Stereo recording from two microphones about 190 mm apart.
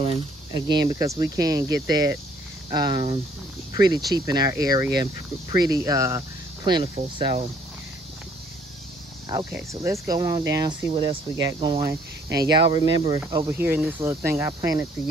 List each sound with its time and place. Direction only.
0.0 s speech: 25° right (ahead or behind)
9.4 s speech: 15° right (ahead or behind)
13.5 s speech: 10° right (ahead or behind)